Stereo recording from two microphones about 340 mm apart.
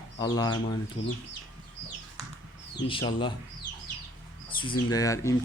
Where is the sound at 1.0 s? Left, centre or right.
Left.